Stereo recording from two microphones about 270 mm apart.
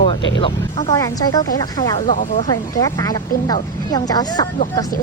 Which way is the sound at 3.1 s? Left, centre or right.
Centre.